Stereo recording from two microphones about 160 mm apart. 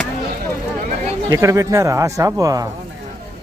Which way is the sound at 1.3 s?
20° right (ahead or behind).